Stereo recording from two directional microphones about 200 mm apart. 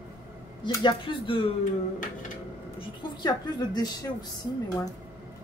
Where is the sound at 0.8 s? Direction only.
25° left (ahead or behind).